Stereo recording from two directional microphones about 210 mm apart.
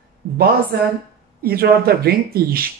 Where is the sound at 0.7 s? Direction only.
50° right (ahead or behind).